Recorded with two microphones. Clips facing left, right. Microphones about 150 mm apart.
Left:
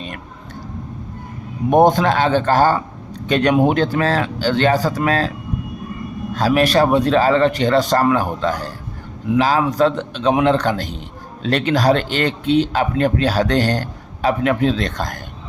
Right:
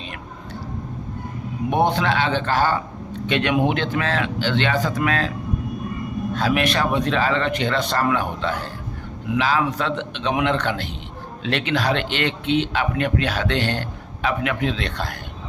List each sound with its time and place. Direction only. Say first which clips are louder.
1.7 s speech: left 7 dB; 40° left (ahead or behind)
6.3 s speech: left 6 dB; 40° left (ahead or behind)